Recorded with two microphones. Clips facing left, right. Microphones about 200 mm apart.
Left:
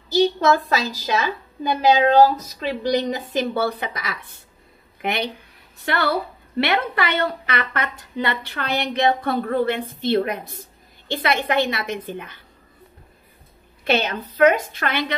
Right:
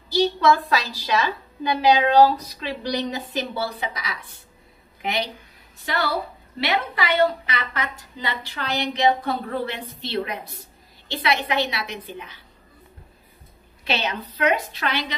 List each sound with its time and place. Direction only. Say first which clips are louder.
0.1 s a sound: left 2 dB; 45° left (ahead or behind)
0.7 s a woman's voice: left 1 dB; 45° left (ahead or behind)
13.8 s a woman's voice: left 5 dB; 50° left (ahead or behind)